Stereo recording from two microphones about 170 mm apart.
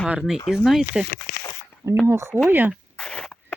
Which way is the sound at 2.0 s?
15° right (ahead or behind).